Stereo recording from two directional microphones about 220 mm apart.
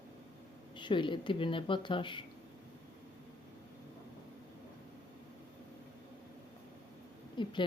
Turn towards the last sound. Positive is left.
turn(degrees=20)  # may be behind; listen again after turning